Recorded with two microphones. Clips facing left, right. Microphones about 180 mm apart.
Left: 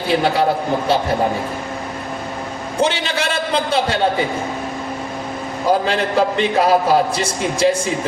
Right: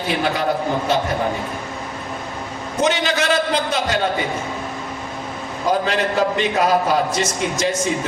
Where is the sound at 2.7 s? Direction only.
30° left (ahead or behind).